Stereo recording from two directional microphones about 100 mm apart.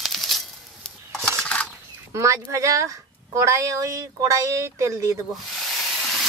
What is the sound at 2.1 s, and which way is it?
Speech, 30° right (ahead or behind).